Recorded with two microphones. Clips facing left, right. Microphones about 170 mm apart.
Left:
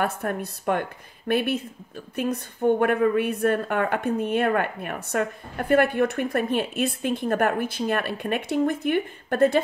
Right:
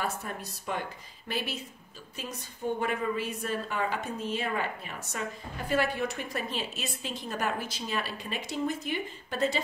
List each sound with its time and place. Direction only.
0.0 s a woman's voice: 60° left (ahead or behind)